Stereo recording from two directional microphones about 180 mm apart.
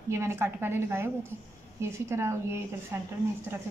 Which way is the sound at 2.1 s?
15° right (ahead or behind).